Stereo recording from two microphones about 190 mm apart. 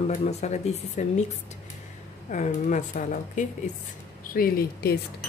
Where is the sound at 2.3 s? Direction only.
40° left (ahead or behind).